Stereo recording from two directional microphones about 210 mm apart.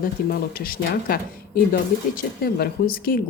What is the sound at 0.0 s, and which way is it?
Speech, 45° left (ahead or behind).